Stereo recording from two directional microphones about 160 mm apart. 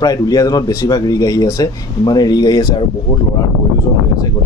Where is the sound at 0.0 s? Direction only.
25° left (ahead or behind).